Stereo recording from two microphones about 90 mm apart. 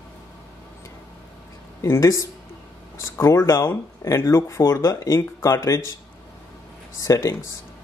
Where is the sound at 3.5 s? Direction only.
30° left (ahead or behind).